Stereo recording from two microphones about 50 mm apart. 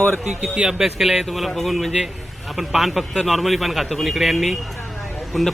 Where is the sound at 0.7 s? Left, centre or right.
Centre.